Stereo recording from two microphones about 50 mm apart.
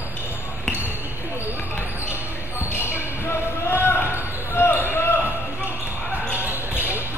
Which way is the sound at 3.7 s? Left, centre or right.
Left.